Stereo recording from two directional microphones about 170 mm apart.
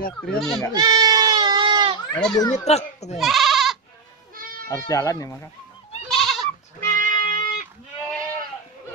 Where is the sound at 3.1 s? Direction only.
Centre (ahead or behind).